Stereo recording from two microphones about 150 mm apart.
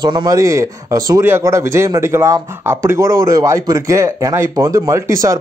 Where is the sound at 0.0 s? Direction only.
25° right (ahead or behind).